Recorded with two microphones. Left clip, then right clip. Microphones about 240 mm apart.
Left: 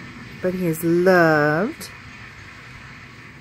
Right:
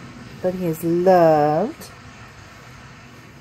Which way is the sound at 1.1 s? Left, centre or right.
Left.